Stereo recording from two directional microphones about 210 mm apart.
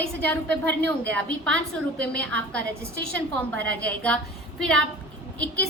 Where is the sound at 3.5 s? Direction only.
65° right (ahead or behind).